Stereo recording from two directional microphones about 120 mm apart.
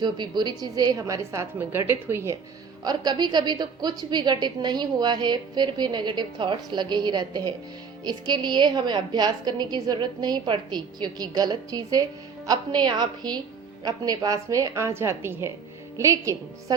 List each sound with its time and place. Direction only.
0.0 s a woman's voice: 40° right (ahead or behind); by 2.4 s 20° right (ahead or behind)
2.8 s a woman's voice: 35° right (ahead or behind)